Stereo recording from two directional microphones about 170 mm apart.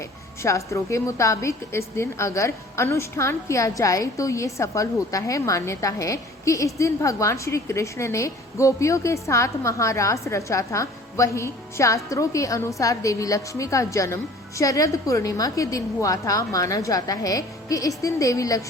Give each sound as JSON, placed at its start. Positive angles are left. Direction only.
{"t": 0.4, "sound": "a woman's voice", "side_deg": 15}